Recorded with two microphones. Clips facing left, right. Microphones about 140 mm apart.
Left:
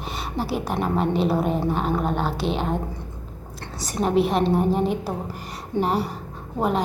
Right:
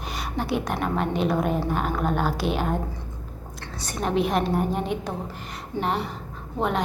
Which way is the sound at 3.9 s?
Centre (ahead or behind).